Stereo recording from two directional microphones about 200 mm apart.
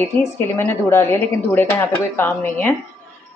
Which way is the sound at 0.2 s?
10° left (ahead or behind).